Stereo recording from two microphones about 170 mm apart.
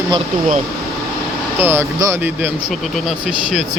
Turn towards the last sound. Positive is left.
turn(degrees=0)  # may be behind; listen again after turning